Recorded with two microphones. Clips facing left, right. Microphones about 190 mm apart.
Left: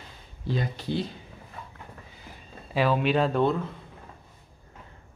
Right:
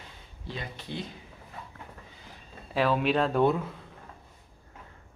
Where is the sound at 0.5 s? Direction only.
35° left (ahead or behind).